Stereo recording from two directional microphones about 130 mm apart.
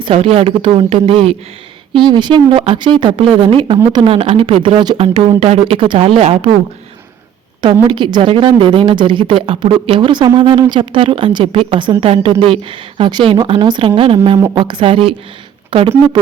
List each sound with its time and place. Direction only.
0.0 s a woman's voice: 50° right (ahead or behind)
4.9 s speech: 50° right (ahead or behind)
7.6 s a woman's voice: 35° right (ahead or behind)